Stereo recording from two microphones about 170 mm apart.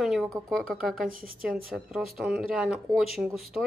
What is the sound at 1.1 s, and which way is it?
Speech, 55° right (ahead or behind).